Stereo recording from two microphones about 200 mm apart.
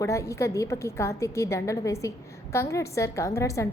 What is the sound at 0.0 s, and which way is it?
A woman's voice, 15° left (ahead or behind).